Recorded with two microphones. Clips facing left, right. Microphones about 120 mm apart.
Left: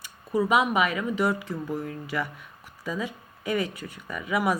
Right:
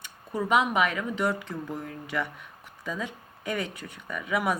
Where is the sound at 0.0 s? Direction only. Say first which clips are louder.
Left 5 dB; 5° left (ahead or behind).